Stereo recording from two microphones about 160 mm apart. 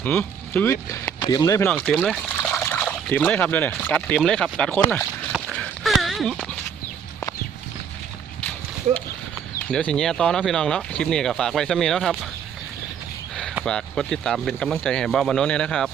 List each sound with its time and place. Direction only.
0.0 s speech: 10° left (ahead or behind)
1.2 s speech: 25° left (ahead or behind)
1.7 s speech: 5° left (ahead or behind)
5.3 s a sound: centre (ahead or behind)
9.6 s speech: 5° left (ahead or behind)
13.7 s speech: 5° left (ahead or behind)